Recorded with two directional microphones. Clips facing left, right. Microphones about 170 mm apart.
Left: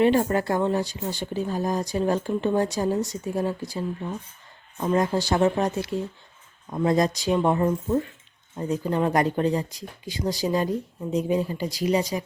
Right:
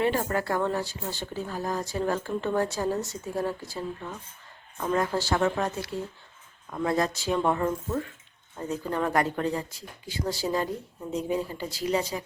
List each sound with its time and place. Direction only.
0.0 s speech: 20° left (ahead or behind)